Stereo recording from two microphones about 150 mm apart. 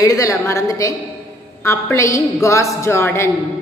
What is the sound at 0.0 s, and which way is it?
A woman's voice, 20° left (ahead or behind).